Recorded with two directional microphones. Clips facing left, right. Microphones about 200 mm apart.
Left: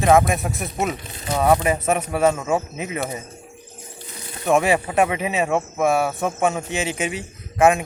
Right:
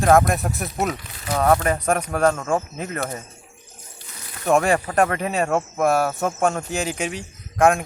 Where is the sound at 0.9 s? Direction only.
25° left (ahead or behind).